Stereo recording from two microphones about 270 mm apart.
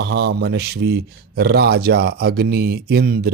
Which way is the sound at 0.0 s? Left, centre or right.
Right.